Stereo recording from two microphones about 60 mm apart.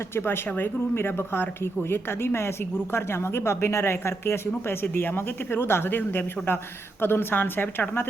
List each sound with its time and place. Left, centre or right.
0.2 s speech: left